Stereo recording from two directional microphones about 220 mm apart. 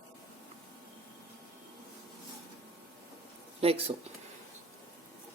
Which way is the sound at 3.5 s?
25° right (ahead or behind).